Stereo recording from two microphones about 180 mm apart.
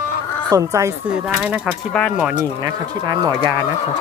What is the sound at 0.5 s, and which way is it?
Speech, 15° right (ahead or behind).